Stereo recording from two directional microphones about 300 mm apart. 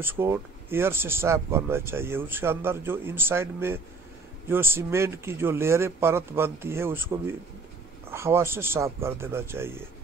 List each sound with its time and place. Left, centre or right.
0.0 s speech: centre